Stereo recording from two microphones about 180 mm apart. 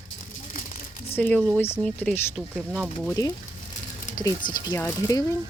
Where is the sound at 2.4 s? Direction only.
5° right (ahead or behind).